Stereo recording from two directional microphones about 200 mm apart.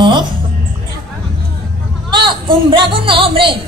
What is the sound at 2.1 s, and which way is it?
Speech, 25° right (ahead or behind).